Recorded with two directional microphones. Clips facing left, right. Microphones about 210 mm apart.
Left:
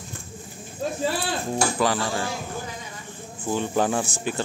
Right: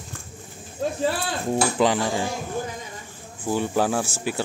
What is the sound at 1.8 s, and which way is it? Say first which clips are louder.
Speech: right 3 dB; 20° right (ahead or behind).